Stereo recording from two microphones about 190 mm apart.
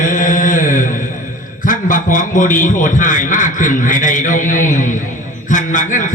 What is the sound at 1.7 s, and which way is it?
A man's voice, 45° left (ahead or behind).